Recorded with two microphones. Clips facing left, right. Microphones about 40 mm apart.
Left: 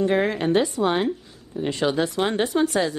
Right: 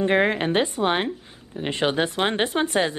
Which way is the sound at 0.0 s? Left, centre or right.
Right.